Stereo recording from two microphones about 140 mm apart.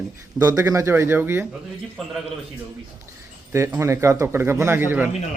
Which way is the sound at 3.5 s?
20° right (ahead or behind).